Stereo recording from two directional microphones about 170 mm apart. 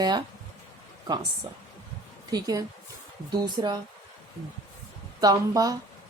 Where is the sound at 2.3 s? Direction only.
20° right (ahead or behind).